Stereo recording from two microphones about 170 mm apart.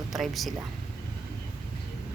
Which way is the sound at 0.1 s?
Centre (ahead or behind).